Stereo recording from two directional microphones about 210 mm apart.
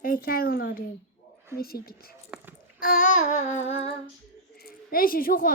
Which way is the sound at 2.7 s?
40° left (ahead or behind).